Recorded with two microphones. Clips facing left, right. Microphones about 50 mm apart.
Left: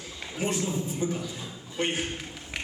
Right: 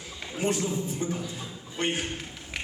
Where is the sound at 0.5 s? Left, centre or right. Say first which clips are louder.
Even; centre.